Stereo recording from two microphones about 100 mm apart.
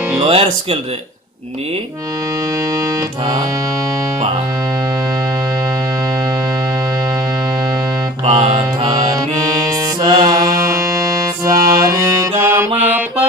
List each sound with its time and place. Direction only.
0.3 s speech: 75° right (ahead or behind)
2.7 s music: 30° right (ahead or behind)
8.4 s mantra: 60° right (ahead or behind)
8.9 s music: 45° right (ahead or behind)
10.4 s music: 30° right (ahead or behind)